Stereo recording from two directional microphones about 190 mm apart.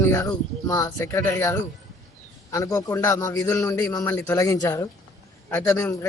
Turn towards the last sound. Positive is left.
turn(degrees=15)  # may be behind; listen again after turning